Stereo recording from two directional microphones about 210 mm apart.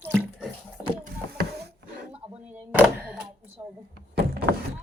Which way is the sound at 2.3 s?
5° right (ahead or behind).